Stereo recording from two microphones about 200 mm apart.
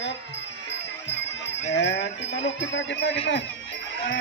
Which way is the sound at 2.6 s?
60° left (ahead or behind).